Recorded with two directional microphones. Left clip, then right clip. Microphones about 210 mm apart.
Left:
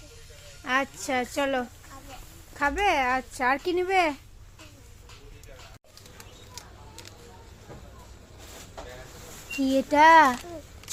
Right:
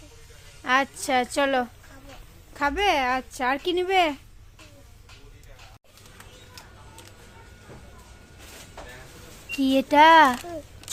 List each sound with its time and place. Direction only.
0.6 s a woman's voice: 15° right (ahead or behind)
6.5 s a sound: centre (ahead or behind)
9.5 s speech: 20° right (ahead or behind)